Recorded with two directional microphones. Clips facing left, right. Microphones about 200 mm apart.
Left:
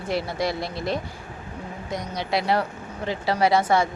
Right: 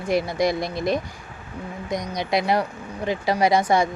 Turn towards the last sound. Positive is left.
turn(degrees=-15)  # may be behind; listen again after turning